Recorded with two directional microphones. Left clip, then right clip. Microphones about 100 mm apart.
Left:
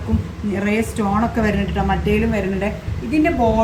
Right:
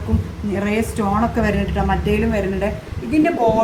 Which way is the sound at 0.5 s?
10° right (ahead or behind).